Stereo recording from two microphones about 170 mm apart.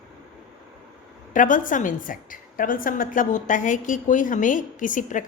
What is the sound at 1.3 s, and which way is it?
A woman's voice, 50° left (ahead or behind).